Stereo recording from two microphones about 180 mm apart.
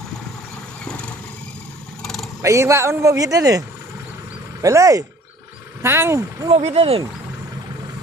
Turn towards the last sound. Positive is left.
turn(degrees=-35)  # may be behind; listen again after turning